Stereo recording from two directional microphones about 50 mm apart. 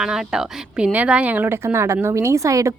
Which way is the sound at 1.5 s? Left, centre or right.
Right.